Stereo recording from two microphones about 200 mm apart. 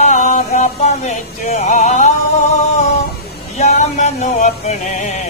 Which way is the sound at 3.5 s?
35° left (ahead or behind).